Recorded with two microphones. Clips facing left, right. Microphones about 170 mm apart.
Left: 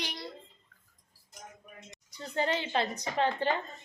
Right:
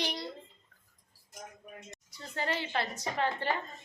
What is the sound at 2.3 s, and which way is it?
Speech, 20° left (ahead or behind).